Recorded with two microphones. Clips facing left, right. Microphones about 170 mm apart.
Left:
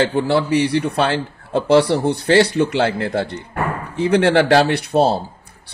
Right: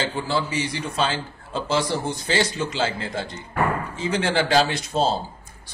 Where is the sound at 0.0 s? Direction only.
65° left (ahead or behind).